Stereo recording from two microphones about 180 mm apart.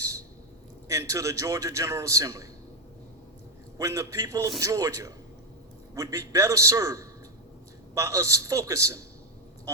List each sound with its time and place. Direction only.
0.9 s a man's voice: 15° right (ahead or behind)
3.8 s a man's voice: 15° right (ahead or behind)